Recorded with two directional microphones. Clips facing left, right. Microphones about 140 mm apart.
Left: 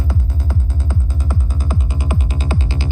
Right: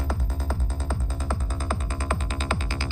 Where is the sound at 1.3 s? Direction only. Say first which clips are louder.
Left 4 dB; 15° left (ahead or behind).